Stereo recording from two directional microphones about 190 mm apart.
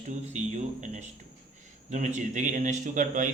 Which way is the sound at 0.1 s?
40° right (ahead or behind).